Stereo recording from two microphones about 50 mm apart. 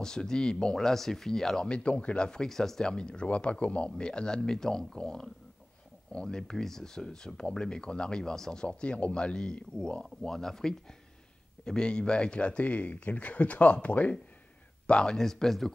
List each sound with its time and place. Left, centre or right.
0.0 s speech: centre
1.7 s speech: left
8.6 s speech: left
10.2 s speech: centre; by 14.1 s left
14.9 s speech: centre